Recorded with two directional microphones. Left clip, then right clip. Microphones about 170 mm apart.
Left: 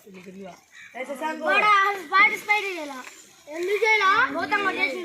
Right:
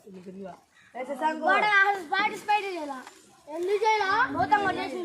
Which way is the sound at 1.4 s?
20° right (ahead or behind).